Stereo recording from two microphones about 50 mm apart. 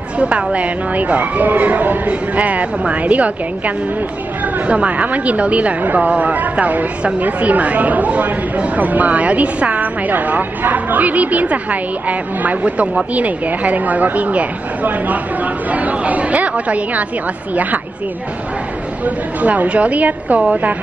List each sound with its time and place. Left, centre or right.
0.2 s speech: right
19.0 s speech: right